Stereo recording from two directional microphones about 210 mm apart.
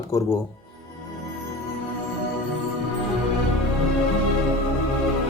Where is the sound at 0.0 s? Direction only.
15° left (ahead or behind).